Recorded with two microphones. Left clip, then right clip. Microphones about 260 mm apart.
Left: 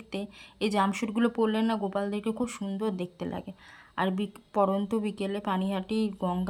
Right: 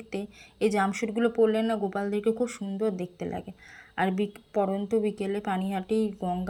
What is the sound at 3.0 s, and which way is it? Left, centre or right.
A woman's voice, left.